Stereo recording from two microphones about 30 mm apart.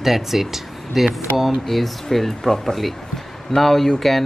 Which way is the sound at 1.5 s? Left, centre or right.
Centre.